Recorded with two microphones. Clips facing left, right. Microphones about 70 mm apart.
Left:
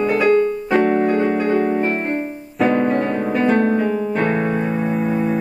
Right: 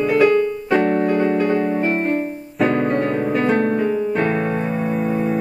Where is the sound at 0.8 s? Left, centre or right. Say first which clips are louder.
Left 1 dB; centre.